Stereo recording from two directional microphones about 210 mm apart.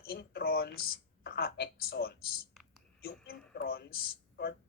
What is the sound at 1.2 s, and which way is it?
Speech, 45° left (ahead or behind).